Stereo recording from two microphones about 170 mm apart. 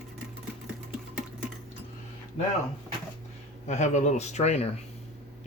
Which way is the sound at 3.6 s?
45° left (ahead or behind).